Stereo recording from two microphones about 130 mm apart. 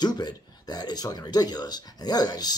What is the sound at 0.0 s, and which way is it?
Speech, 30° left (ahead or behind).